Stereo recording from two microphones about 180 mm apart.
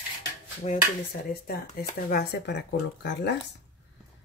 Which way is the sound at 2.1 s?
65° left (ahead or behind).